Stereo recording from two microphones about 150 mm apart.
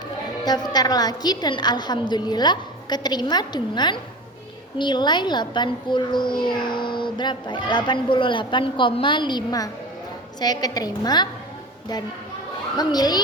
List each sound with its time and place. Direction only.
0.4 s a woman's voice: 25° left (ahead or behind)
12.7 s a woman's voice: 25° left (ahead or behind)